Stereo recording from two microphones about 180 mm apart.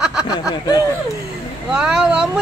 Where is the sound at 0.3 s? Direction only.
25° left (ahead or behind).